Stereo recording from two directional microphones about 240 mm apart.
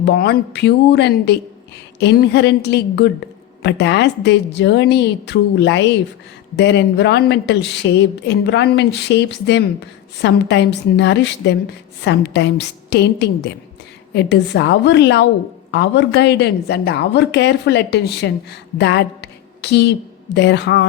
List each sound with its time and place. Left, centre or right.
0.0 s a woman's voice: left